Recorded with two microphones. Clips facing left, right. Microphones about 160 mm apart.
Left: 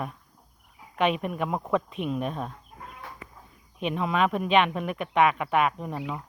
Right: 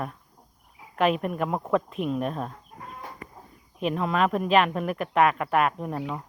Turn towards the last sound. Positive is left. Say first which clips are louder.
# right 2 dB
turn(degrees=0)  # may be behind; listen again after turning